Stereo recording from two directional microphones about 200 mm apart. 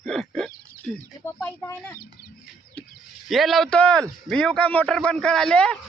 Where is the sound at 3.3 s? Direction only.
Centre (ahead or behind).